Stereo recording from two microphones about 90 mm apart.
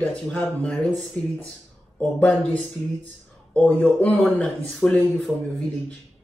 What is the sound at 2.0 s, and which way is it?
Speech, 10° left (ahead or behind).